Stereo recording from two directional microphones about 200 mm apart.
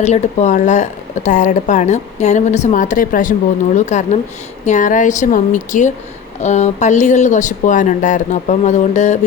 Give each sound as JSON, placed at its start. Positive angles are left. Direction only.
{"t": 0.0, "sound": "speech", "side_deg": 35}